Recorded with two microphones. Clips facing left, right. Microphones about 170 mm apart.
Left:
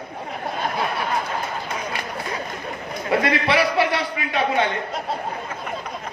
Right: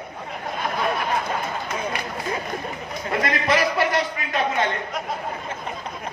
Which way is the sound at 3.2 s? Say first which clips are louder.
Even; 45° right (ahead or behind).